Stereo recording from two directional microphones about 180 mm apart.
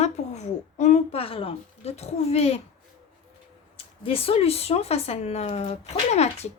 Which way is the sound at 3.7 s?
30° left (ahead or behind).